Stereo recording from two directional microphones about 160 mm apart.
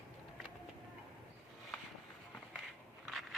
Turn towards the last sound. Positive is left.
turn(degrees=0)  # may be behind; listen again after turning